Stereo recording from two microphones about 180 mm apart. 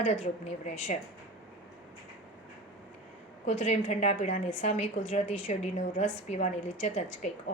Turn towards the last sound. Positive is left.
turn(degrees=40)  # may be behind; listen again after turning